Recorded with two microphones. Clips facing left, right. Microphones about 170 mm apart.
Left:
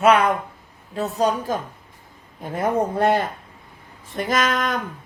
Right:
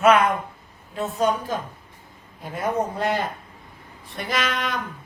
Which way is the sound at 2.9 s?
55° left (ahead or behind).